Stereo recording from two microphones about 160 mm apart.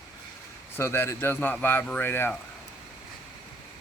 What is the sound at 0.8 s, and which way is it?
A man's voice, 15° left (ahead or behind).